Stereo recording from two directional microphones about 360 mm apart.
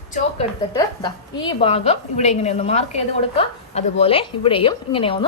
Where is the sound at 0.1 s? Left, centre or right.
Centre.